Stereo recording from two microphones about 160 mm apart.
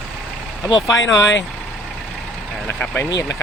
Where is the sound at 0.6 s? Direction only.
25° left (ahead or behind).